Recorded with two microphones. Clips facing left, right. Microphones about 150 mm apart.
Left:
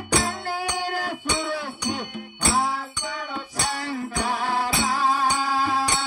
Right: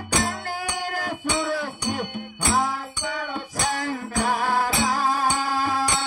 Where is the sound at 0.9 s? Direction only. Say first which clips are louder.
Left 1 dB; 45° right (ahead or behind).